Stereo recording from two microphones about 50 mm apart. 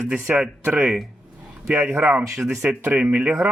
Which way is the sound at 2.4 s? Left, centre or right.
Centre.